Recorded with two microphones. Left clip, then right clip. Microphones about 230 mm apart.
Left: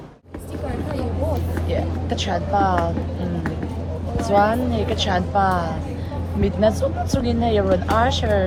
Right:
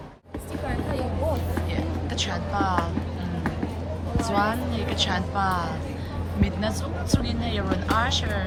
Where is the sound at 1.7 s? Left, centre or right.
Centre.